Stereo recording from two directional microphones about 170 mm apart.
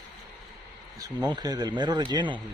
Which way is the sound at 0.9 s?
20° right (ahead or behind).